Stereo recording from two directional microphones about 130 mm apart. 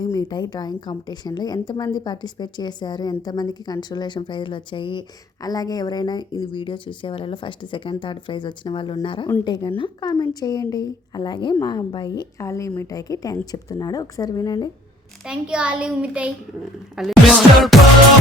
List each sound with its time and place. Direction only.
0.0 s a woman's voice: 30° left (ahead or behind)
12.4 s a woman's voice: 25° left (ahead or behind)
15.2 s a child's voice: 5° right (ahead or behind)
16.9 s music: centre (ahead or behind)